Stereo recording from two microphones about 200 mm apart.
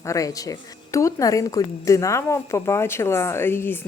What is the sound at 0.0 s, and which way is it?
A woman's voice, 15° left (ahead or behind).